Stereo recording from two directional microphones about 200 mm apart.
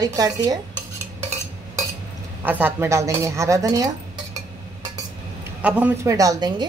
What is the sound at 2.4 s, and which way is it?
A woman's voice, 10° right (ahead or behind).